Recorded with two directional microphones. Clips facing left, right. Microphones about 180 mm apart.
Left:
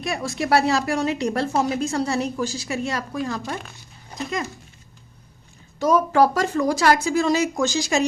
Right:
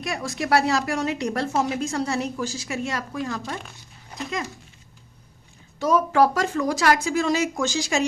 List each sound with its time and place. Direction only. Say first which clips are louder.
0.0 s speech: left 2 dB; 25° left (ahead or behind)
5.8 s speech: left 2 dB; 40° left (ahead or behind)